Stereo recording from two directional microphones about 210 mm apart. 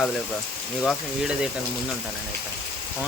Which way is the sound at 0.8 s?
Centre (ahead or behind).